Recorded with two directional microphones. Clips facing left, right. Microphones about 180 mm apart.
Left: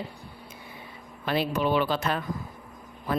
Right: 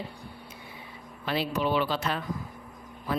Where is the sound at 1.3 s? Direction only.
50° left (ahead or behind).